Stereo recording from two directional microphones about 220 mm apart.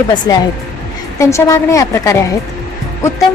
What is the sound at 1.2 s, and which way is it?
Speech, 15° left (ahead or behind).